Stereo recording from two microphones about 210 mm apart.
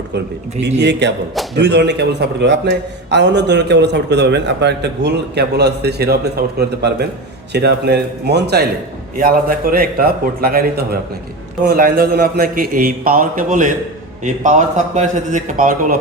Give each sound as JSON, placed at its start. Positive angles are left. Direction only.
{"t": 0.6, "sound": "a man's voice", "side_deg": -55}
{"t": 9.1, "sound": "a man's voice", "side_deg": -40}
{"t": 14.9, "sound": "a man's voice", "side_deg": -35}